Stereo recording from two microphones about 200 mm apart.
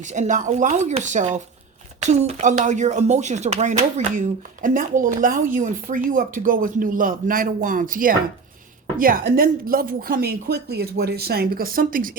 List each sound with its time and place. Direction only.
0.0 s speech: 35° right (ahead or behind)